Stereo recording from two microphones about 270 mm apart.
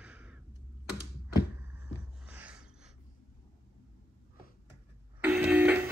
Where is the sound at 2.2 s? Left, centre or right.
Centre.